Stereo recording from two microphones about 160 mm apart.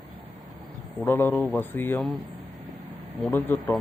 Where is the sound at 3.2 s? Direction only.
15° left (ahead or behind).